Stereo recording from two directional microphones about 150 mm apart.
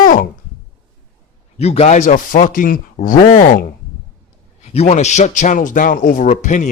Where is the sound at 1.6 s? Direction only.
45° left (ahead or behind); by 3.1 s 70° left (ahead or behind).